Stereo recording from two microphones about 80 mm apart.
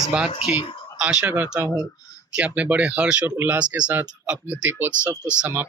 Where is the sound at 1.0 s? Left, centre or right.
Centre.